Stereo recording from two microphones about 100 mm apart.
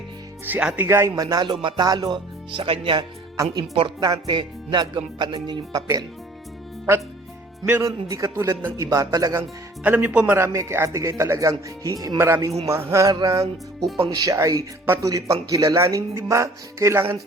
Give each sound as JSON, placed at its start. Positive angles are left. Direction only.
{"t": 0.4, "sound": "speech", "side_deg": -15}
{"t": 0.9, "sound": "speech", "side_deg": -30}
{"t": 3.0, "sound": "speech", "side_deg": -40}
{"t": 7.6, "sound": "speech", "side_deg": -30}
{"t": 9.8, "sound": "speech", "side_deg": -15}
{"t": 10.3, "sound": "speech", "side_deg": -30}
{"t": 12.0, "sound": "a sound", "side_deg": -30}
{"t": 14.2, "sound": "speech", "side_deg": -35}